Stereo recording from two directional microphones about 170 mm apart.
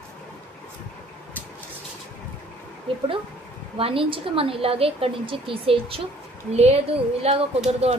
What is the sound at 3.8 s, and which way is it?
A woman's voice, 35° right (ahead or behind).